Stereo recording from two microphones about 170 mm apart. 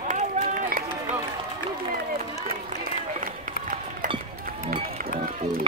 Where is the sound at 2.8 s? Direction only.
55° right (ahead or behind).